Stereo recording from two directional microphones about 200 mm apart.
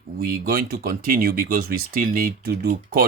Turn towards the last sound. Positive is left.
turn(degrees=-50)  # may be behind; listen again after turning